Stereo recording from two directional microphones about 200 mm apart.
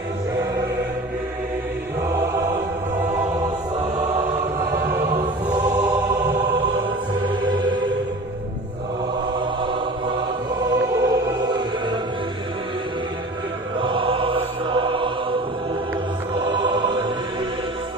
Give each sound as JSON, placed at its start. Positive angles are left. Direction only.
{"t": 7.4, "sound": "music", "side_deg": -20}
{"t": 10.6, "sound": "music", "side_deg": -15}
{"t": 13.7, "sound": "choir", "side_deg": -25}
{"t": 16.3, "sound": "music", "side_deg": -25}